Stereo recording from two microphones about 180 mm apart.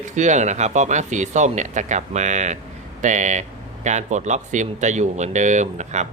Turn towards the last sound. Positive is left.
turn(degrees=-40)  # may be behind; listen again after turning